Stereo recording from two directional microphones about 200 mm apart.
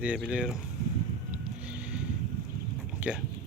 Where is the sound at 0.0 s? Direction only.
5° right (ahead or behind).